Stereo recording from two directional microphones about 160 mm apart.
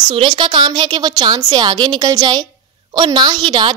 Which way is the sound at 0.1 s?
30° right (ahead or behind).